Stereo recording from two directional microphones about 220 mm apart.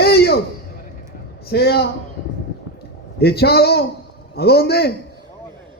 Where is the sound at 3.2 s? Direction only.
45° left (ahead or behind).